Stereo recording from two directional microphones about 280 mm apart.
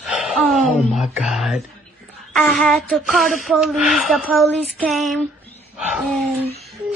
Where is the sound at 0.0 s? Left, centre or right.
Centre.